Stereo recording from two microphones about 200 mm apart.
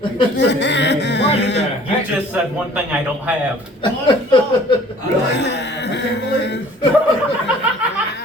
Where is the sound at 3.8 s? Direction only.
25° left (ahead or behind).